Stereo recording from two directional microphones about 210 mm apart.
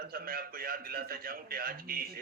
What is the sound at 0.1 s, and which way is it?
A man's voice, 45° right (ahead or behind).